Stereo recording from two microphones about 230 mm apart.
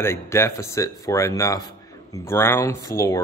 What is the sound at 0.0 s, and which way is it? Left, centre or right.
Speech, centre.